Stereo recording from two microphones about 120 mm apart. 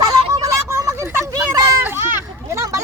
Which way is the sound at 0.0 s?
30° right (ahead or behind).